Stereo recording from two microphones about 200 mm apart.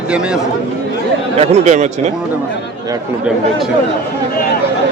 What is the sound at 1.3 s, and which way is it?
Speech, 30° right (ahead or behind).